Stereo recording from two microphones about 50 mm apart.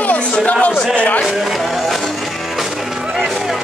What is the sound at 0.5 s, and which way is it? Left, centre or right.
Speech, left.